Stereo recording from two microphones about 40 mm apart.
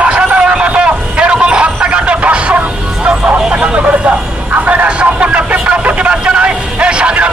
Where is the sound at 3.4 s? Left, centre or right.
Right.